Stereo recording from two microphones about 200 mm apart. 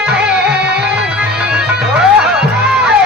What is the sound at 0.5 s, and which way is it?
Music, 55° right (ahead or behind).